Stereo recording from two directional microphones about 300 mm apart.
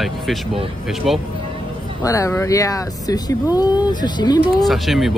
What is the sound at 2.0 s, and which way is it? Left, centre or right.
Speech, centre.